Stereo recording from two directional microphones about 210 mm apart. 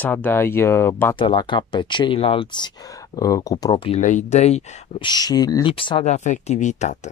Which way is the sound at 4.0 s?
35° left (ahead or behind).